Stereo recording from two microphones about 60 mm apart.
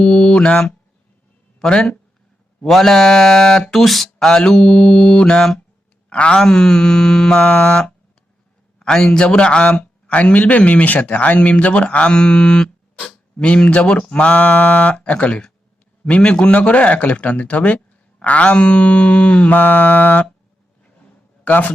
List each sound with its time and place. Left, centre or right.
0.0 s speech: centre
7.3 s a man's voice: left
21.4 s a man's voice: left